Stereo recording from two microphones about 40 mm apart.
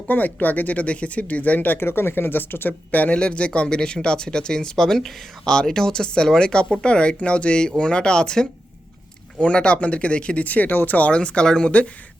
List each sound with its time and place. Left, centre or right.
0.1 s speech: left
1.8 s speech: left
2.9 s speech: left
3.2 s speech: left
10.4 s speech: left
11.1 s speech: left